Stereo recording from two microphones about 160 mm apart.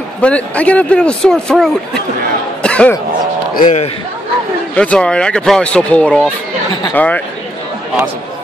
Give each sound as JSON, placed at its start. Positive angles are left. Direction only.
{"t": 0.2, "sound": "speech", "side_deg": 10}
{"t": 2.6, "sound": "cough", "side_deg": 5}
{"t": 3.5, "sound": "speech", "side_deg": 55}
{"t": 4.7, "sound": "speech", "side_deg": 5}